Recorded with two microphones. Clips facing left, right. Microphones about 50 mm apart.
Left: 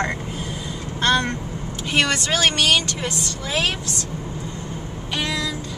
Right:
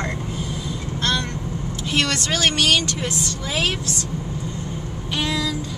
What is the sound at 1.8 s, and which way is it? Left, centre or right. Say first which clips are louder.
A woman's voice: left 2 dB; centre.